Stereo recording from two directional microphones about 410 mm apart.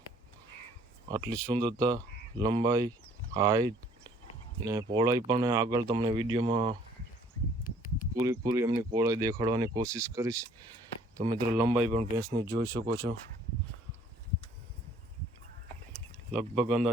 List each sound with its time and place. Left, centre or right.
1.0 s speech: centre
8.1 s speech: centre
16.6 s a man's voice: centre